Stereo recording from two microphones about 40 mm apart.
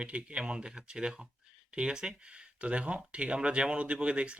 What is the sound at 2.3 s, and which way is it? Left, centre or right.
Speech, right.